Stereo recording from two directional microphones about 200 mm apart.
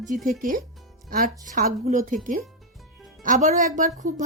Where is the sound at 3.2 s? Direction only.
40° right (ahead or behind).